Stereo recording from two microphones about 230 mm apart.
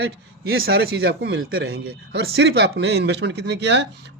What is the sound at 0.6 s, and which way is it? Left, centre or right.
Speech, right.